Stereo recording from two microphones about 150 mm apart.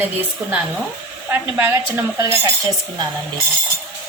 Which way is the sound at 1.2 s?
15° right (ahead or behind).